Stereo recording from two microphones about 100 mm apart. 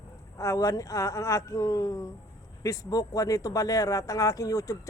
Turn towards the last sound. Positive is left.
turn(degrees=35)  # may be behind; listen again after turning